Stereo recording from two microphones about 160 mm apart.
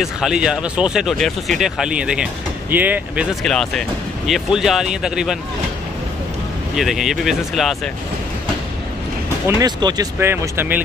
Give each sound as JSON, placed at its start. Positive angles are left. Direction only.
{"t": 0.0, "sound": "speech", "side_deg": -5}
{"t": 3.4, "sound": "speech", "side_deg": 5}
{"t": 6.7, "sound": "speech", "side_deg": 0}
{"t": 9.5, "sound": "speech", "side_deg": -25}
{"t": 10.1, "sound": "speech", "side_deg": -15}